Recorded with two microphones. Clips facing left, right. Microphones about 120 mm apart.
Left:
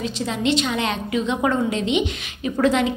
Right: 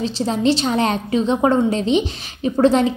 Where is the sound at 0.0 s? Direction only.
35° right (ahead or behind).